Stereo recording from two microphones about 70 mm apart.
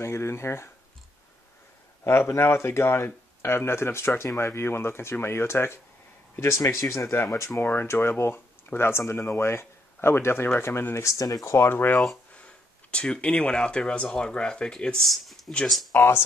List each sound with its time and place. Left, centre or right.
0.0 s speech: left
2.0 s speech: left
7.6 s speech: left
12.4 s speech: centre
15.0 s speech: centre
15.9 s speech: left